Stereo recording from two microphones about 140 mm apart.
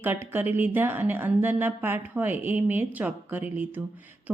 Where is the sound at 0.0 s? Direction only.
15° right (ahead or behind).